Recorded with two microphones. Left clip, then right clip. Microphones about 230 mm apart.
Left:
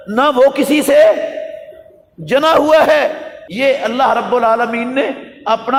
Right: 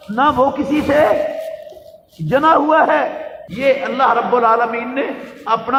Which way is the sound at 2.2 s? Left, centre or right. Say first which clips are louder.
Left 2 dB; left.